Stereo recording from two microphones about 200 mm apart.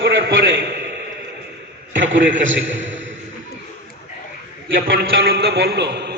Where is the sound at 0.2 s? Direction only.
60° right (ahead or behind).